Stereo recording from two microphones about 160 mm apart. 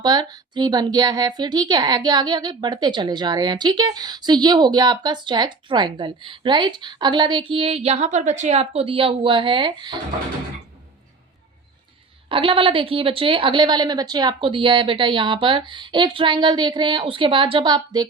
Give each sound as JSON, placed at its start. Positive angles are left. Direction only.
{"t": 0.0, "sound": "a woman's voice", "side_deg": -25}
{"t": 12.3, "sound": "a woman's voice", "side_deg": -35}